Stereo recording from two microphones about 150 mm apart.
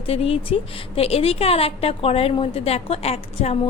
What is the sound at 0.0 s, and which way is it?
A woman's voice, 40° left (ahead or behind).